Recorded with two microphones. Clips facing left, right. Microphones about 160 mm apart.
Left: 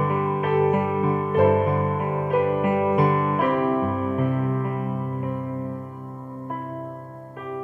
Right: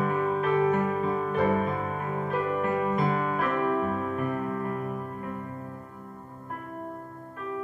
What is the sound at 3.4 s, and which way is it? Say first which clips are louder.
Music: left 5 dB; 50° left (ahead or behind).